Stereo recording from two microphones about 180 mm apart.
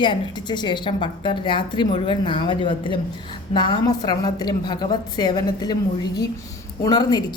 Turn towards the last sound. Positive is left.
turn(degrees=25)  # may be behind; listen again after turning